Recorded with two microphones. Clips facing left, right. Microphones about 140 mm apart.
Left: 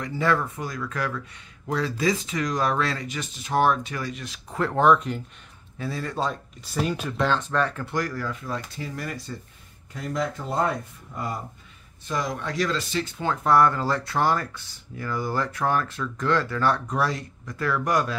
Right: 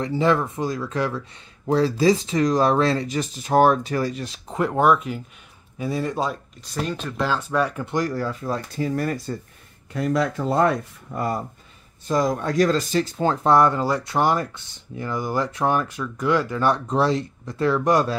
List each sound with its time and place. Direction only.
0.0 s speech: 20° right (ahead or behind)
4.6 s speech: 10° right (ahead or behind)
5.8 s speech: 20° right (ahead or behind)
6.6 s speech: 5° left (ahead or behind)
7.2 s speech: 5° right (ahead or behind); by 8.6 s 35° right (ahead or behind)
8.7 s speech: 45° right (ahead or behind)
9.9 s speech: 75° right (ahead or behind)
11.1 s speech: 65° right (ahead or behind)
12.1 s speech: 40° right (ahead or behind); by 18.1 s 25° right (ahead or behind)